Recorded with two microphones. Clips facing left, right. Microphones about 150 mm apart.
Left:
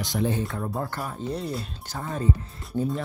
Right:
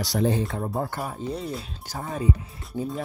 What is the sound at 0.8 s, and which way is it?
Speech, 10° right (ahead or behind).